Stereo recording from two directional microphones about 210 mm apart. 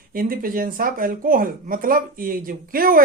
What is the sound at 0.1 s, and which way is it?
Speech, 40° right (ahead or behind).